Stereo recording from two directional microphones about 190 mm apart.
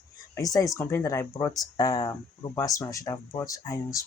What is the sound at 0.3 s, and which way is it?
Speech, 20° left (ahead or behind).